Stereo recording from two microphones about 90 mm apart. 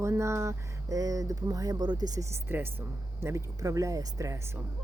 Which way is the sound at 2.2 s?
30° right (ahead or behind).